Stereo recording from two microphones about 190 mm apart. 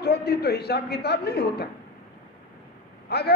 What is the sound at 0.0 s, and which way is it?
A woman's voice, 55° left (ahead or behind).